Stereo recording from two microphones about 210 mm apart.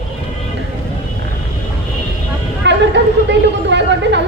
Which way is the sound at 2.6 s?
55° right (ahead or behind).